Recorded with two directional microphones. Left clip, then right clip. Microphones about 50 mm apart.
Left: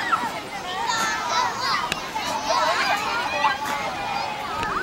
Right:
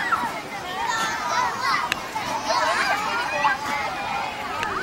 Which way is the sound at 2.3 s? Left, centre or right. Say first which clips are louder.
Even; left.